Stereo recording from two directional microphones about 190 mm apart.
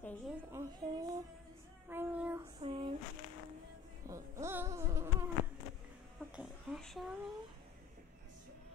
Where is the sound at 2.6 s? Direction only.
25° right (ahead or behind).